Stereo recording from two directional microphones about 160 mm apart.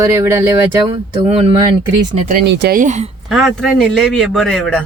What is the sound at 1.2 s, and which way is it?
Speech, 35° right (ahead or behind).